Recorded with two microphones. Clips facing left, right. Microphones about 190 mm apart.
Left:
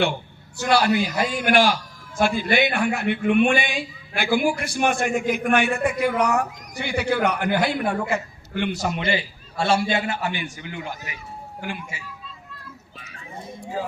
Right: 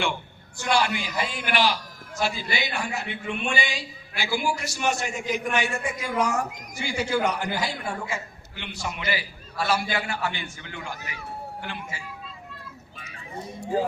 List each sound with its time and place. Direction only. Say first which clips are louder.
0.6 s a man's voice: left 5 dB; 40° left (ahead or behind)
9.0 s a man's voice: left 5 dB; 25° left (ahead or behind); by 12.0 s 10° left (ahead or behind)